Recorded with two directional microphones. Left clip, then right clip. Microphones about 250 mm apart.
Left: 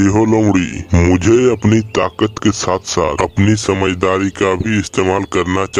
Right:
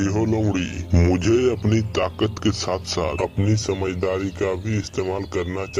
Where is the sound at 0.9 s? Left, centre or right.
Left.